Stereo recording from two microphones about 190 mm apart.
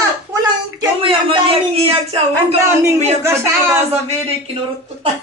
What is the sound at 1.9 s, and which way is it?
Speech, 30° right (ahead or behind).